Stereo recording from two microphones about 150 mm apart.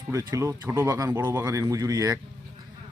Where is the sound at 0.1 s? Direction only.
20° right (ahead or behind).